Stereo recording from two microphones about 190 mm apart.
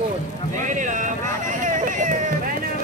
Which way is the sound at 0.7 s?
40° right (ahead or behind).